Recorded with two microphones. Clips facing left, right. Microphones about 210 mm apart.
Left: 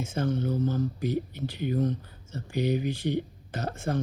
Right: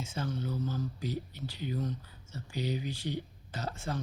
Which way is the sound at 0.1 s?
50° left (ahead or behind).